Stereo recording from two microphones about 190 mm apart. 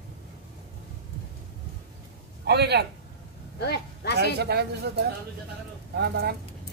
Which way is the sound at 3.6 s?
55° left (ahead or behind).